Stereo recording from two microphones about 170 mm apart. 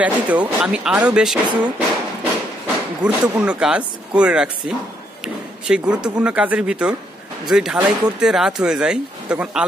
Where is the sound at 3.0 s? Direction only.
5° right (ahead or behind).